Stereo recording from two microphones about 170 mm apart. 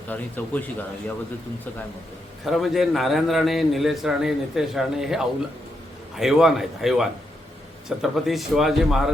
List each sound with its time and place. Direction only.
0.1 s speech: 10° left (ahead or behind)
2.4 s a man's voice: centre (ahead or behind)